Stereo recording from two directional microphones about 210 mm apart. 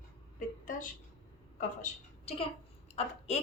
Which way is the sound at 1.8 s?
30° left (ahead or behind).